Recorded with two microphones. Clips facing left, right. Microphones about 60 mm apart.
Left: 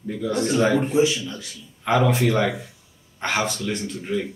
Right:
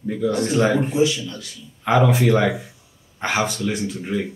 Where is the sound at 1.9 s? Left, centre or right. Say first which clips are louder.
Right 3 dB; centre.